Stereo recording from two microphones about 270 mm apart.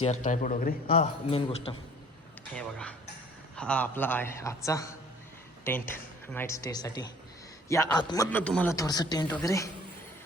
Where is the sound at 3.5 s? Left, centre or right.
Centre.